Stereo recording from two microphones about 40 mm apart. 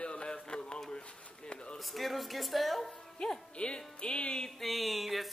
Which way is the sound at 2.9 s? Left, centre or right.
Centre.